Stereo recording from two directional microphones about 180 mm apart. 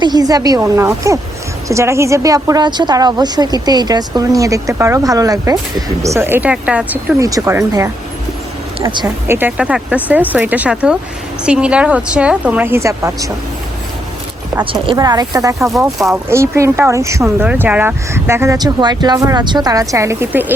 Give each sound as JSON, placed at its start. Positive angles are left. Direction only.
{"t": 0.0, "sound": "a woman's voice", "side_deg": -20}
{"t": 7.2, "sound": "a woman's voice", "side_deg": -20}
{"t": 9.0, "sound": "speech", "side_deg": -15}
{"t": 14.6, "sound": "a woman's voice", "side_deg": -30}
{"t": 15.7, "sound": "speech", "side_deg": 0}
{"t": 16.3, "sound": "speech", "side_deg": -15}